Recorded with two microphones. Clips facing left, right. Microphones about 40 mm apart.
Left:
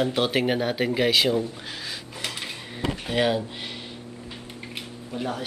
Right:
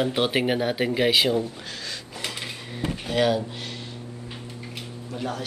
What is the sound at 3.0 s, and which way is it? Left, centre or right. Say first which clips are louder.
Speech: right 2 dB; centre.